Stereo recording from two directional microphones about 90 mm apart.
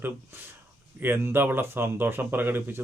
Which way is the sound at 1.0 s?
25° right (ahead or behind).